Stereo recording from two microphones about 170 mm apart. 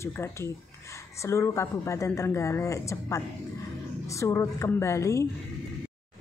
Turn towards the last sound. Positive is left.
turn(degrees=15)  # may be behind; listen again after turning